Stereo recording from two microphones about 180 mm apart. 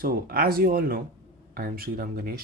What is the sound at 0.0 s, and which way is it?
Speech, 55° right (ahead or behind).